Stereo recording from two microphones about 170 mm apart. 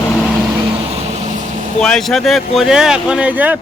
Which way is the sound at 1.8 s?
Centre (ahead or behind).